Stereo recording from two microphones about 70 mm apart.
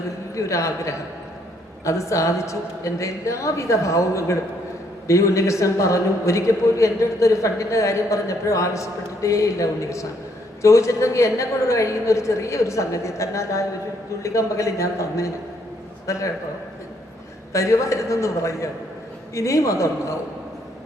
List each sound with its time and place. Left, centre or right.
0.3 s a man's voice: left
17.5 s a man's voice: left